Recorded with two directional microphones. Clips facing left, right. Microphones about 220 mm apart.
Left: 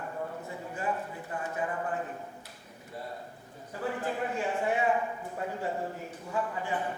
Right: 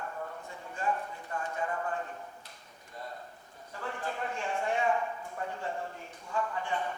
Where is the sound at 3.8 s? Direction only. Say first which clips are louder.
Left 5 dB; 20° left (ahead or behind).